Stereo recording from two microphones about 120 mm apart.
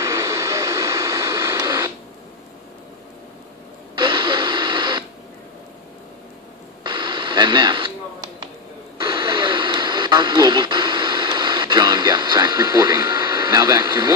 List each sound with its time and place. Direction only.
0.0 s vehicle: 25° right (ahead or behind)
3.9 s radio: 40° right (ahead or behind)
6.8 s radio: 40° right (ahead or behind)
9.0 s radio: 40° right (ahead or behind)